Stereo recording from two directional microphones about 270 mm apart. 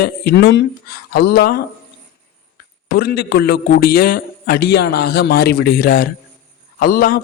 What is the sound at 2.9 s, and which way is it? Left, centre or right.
A man's voice, left.